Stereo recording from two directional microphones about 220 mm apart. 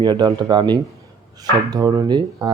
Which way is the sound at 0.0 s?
20° right (ahead or behind).